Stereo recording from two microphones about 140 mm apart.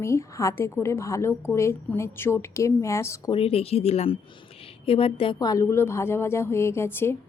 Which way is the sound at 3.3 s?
45° left (ahead or behind).